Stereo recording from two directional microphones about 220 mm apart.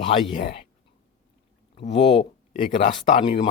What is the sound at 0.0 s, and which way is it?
Speech, 25° left (ahead or behind).